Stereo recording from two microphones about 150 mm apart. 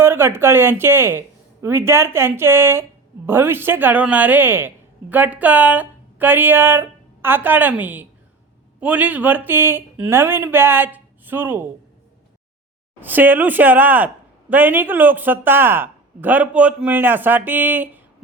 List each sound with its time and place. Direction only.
0.0 s speech: 15° right (ahead or behind)
13.0 s speech: 10° right (ahead or behind)